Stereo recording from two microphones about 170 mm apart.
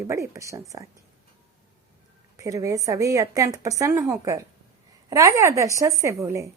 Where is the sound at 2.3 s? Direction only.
20° right (ahead or behind).